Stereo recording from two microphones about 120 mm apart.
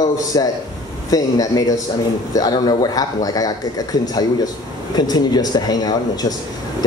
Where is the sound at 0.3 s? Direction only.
35° left (ahead or behind).